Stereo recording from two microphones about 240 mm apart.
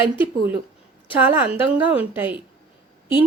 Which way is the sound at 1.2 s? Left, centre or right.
Centre.